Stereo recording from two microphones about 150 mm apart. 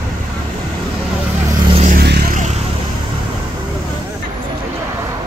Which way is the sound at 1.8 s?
75° right (ahead or behind).